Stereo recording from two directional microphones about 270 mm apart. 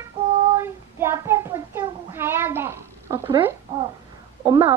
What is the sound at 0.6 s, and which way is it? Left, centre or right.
Child singing, centre.